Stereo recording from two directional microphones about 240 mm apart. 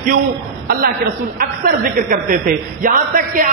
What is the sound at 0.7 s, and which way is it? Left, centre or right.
A man's voice, right.